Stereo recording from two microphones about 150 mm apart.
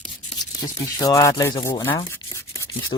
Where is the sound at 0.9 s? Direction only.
20° left (ahead or behind).